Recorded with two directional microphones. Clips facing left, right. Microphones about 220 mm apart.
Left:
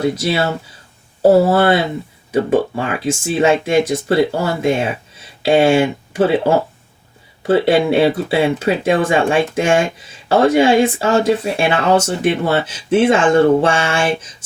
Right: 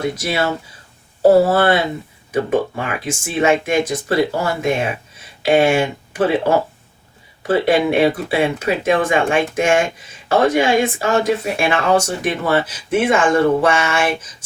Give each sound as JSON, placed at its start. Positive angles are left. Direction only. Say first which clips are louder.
{"t": 0.0, "sound": "speech", "louder": "left 3 dB", "side_deg": 25}
{"t": 1.5, "sound": "speech", "louder": "left 2 dB", "side_deg": 25}
{"t": 7.4, "sound": "speech", "louder": "left 2 dB", "side_deg": 25}